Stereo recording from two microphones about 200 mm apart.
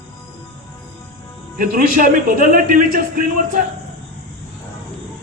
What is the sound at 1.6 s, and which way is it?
A man's voice, 45° right (ahead or behind).